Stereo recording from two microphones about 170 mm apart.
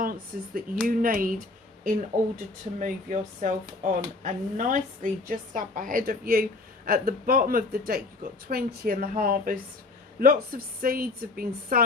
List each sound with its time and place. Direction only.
0.0 s a woman's voice: 55° right (ahead or behind)